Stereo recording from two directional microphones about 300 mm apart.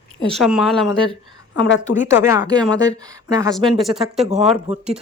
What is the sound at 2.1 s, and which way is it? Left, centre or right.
Speech, centre.